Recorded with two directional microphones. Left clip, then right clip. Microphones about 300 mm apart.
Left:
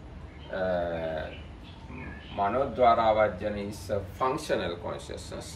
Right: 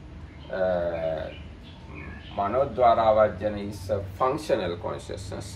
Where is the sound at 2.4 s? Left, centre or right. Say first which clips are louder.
Right 2 dB; centre.